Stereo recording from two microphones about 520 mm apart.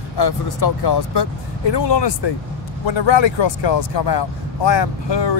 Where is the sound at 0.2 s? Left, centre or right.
Left.